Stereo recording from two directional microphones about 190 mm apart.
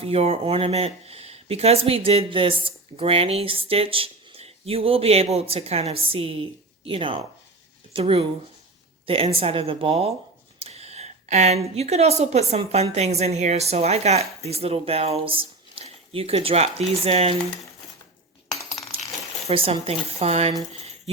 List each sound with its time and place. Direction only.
0.0 s a woman's voice: 30° right (ahead or behind)
18.9 s coin: 30° right (ahead or behind)
19.5 s speech: 30° right (ahead or behind)